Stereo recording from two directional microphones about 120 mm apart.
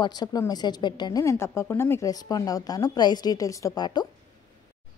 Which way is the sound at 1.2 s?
25° left (ahead or behind).